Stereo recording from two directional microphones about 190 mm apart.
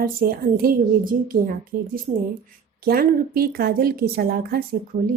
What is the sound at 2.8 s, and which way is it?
A woman's voice, 50° right (ahead or behind).